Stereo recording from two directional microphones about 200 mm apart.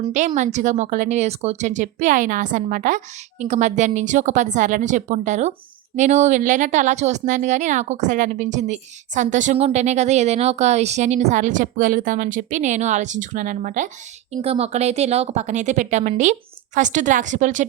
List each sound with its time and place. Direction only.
0.3 s a woman's voice: 40° right (ahead or behind)